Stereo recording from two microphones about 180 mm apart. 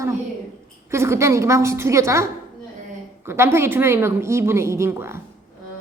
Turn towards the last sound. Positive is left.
turn(degrees=-15)  # may be behind; listen again after turning